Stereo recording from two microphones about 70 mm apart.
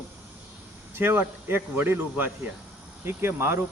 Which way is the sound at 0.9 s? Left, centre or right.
Right.